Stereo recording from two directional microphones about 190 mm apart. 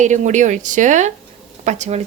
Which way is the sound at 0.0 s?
40° right (ahead or behind).